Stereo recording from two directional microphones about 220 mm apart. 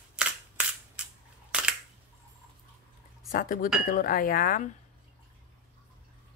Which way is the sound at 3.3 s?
40° left (ahead or behind).